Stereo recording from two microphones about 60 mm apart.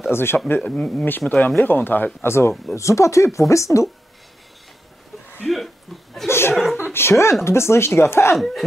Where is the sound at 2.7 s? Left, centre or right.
Left.